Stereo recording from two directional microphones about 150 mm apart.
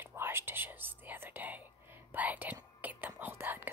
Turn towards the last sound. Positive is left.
turn(degrees=-15)  # may be behind; listen again after turning